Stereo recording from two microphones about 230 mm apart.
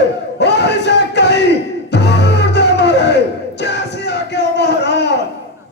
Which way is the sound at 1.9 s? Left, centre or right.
Left.